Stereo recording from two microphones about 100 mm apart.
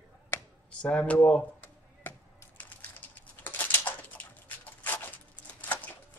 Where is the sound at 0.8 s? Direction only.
10° left (ahead or behind).